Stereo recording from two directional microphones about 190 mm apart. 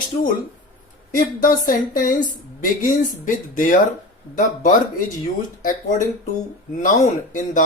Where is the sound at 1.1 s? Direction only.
45° left (ahead or behind).